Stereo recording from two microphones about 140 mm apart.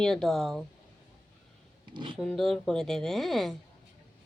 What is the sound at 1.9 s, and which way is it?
Speech, 35° right (ahead or behind).